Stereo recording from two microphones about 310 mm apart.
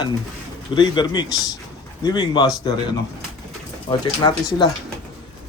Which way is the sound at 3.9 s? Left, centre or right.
Centre.